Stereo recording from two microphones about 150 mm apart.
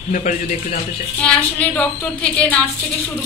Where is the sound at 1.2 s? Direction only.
5° left (ahead or behind).